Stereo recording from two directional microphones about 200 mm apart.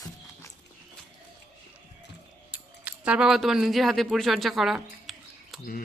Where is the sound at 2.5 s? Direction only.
5° right (ahead or behind).